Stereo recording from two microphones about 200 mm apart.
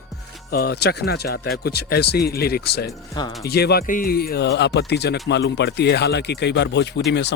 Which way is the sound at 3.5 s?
55° left (ahead or behind).